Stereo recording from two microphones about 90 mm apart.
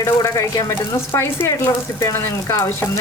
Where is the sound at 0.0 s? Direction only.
35° left (ahead or behind).